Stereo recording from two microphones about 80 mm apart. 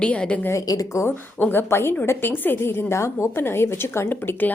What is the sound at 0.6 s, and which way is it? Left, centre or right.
Speech, left.